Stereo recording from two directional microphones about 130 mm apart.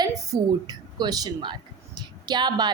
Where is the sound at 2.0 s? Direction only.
35° right (ahead or behind).